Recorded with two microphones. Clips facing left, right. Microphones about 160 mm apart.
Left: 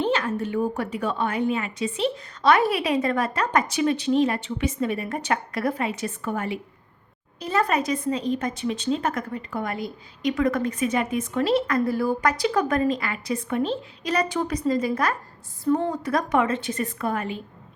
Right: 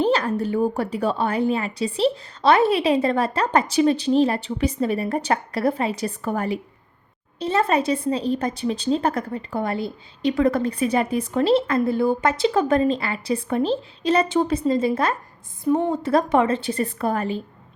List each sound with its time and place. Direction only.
0.0 s a woman's voice: 35° right (ahead or behind)
7.3 s a woman's voice: 25° right (ahead or behind)